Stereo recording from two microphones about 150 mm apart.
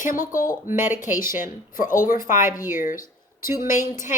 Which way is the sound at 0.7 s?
15° right (ahead or behind).